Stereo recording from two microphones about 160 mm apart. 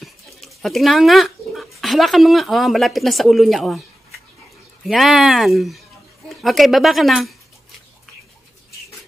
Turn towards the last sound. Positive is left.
turn(degrees=0)  # may be behind; listen again after turning